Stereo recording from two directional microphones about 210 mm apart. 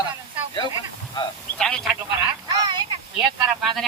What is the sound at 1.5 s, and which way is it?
Telephone, 5° left (ahead or behind).